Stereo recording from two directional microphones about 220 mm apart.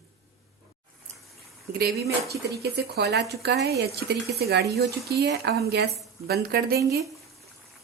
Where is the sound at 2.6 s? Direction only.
45° right (ahead or behind).